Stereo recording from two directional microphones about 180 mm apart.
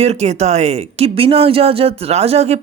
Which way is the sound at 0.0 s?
35° right (ahead or behind).